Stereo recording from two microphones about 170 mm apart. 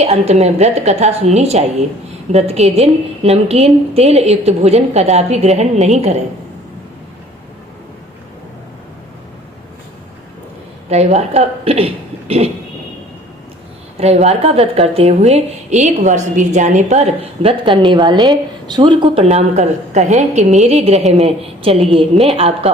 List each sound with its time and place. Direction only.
0.0 s speech: 40° right (ahead or behind)
10.8 s speech: 40° right (ahead or behind)
14.0 s speech: 40° right (ahead or behind)